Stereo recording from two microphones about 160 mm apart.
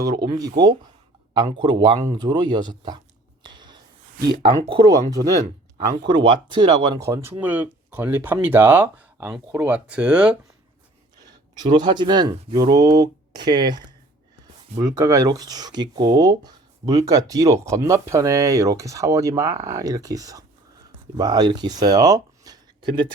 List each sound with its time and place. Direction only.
0.3 s speech: 25° right (ahead or behind)
3.4 s a sound: 30° right (ahead or behind)
4.3 s speech: 35° right (ahead or behind)
4.9 s speech: 20° right (ahead or behind)
7.1 s speech: 15° right (ahead or behind)
11.3 s speech: 30° right (ahead or behind)